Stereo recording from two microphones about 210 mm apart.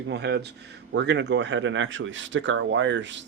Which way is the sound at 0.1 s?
55° right (ahead or behind).